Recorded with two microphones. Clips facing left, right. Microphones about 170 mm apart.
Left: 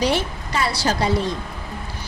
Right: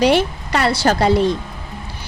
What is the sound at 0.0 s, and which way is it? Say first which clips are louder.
Speech: right 6 dB; 70° right (ahead or behind).